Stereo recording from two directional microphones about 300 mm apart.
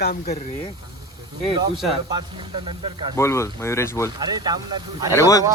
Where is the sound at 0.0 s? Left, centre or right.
Left.